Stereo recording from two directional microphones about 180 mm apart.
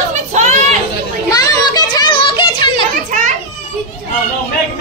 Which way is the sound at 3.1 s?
45° right (ahead or behind).